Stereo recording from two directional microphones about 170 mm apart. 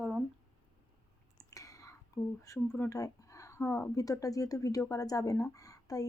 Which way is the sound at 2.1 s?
20° left (ahead or behind).